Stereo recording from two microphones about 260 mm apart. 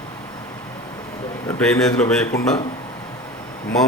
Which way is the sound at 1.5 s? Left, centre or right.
Centre.